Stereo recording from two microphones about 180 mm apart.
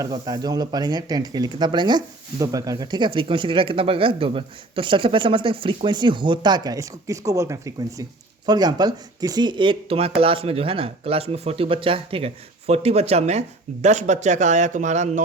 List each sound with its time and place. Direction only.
0.0 s speech: 20° right (ahead or behind); by 15.2 s 40° right (ahead or behind)